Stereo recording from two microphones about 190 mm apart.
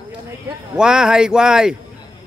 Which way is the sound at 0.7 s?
5° right (ahead or behind).